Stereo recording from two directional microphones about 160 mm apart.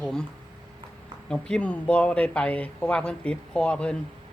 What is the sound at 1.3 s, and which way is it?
Speech, 5° left (ahead or behind).